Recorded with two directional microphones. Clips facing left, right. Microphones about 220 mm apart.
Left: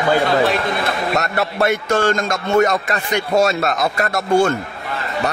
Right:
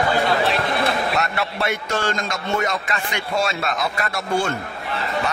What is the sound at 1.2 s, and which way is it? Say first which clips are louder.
A man's voice: left 5 dB; 45° left (ahead or behind).